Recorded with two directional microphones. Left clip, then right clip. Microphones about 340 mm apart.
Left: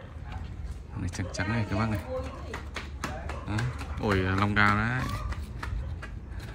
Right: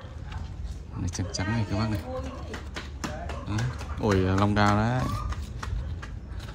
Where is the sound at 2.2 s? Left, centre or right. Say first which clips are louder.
Right 1 dB; right.